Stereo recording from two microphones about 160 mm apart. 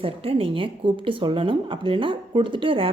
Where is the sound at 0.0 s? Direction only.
35° right (ahead or behind).